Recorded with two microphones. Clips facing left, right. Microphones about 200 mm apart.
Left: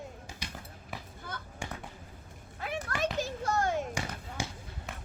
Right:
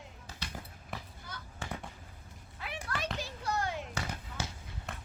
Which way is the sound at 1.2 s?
55° left (ahead or behind).